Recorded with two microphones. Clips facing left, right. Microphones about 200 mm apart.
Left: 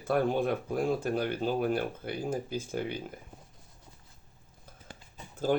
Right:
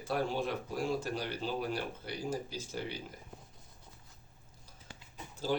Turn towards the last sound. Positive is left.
turn(degrees=50)  # may be behind; listen again after turning